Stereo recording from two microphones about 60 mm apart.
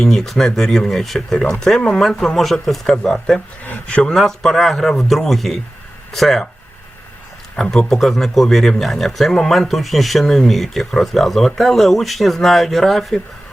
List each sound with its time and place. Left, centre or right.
0.0 s speech: centre
3.6 s speech: left
4.2 s speech: centre
7.5 s speech: centre